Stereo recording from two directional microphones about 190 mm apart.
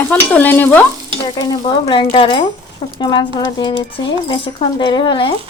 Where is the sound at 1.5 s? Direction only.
20° left (ahead or behind).